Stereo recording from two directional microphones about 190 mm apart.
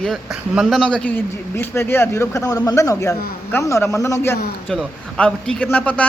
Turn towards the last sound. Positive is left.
turn(degrees=5)  # may be behind; listen again after turning